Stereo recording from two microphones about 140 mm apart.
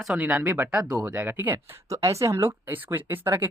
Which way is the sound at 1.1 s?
15° right (ahead or behind).